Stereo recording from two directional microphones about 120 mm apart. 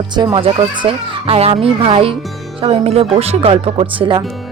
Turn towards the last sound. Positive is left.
turn(degrees=-45)  # may be behind; listen again after turning